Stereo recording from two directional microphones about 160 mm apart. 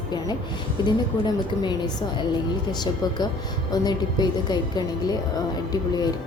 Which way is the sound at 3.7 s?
25° left (ahead or behind).